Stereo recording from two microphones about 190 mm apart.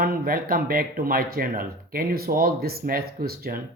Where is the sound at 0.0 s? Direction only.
50° right (ahead or behind).